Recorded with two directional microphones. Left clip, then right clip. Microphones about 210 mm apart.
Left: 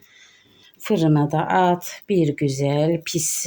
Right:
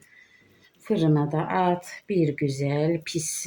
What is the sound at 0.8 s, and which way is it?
Speech, 45° left (ahead or behind).